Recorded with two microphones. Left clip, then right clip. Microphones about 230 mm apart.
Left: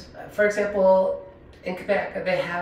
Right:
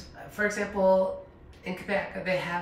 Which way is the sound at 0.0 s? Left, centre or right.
Centre.